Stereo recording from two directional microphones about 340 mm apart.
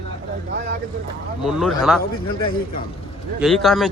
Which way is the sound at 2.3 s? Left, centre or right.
Left.